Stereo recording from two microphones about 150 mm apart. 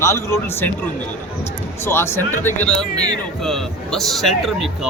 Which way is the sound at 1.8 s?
15° left (ahead or behind).